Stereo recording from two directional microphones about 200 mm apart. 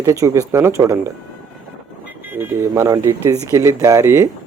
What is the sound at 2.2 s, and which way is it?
Speech, 10° right (ahead or behind).